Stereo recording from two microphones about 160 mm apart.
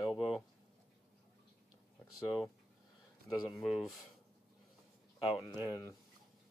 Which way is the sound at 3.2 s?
Centre (ahead or behind).